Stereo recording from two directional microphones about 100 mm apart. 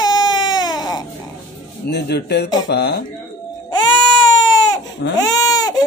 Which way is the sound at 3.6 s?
45° left (ahead or behind).